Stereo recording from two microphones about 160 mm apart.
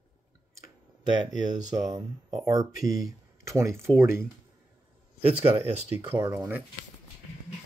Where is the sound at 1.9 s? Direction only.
25° right (ahead or behind).